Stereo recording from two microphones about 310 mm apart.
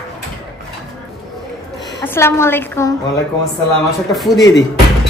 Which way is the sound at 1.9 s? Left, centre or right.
Centre.